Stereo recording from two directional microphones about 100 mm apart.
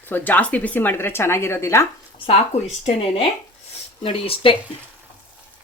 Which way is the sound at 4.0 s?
65° left (ahead or behind).